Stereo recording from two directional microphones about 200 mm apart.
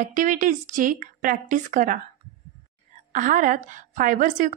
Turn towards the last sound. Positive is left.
turn(degrees=-40)  # may be behind; listen again after turning